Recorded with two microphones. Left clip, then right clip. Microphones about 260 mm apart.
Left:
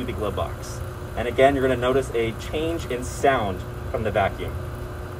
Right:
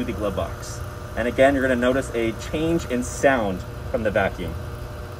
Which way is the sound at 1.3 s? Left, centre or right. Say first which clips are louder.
Even; right.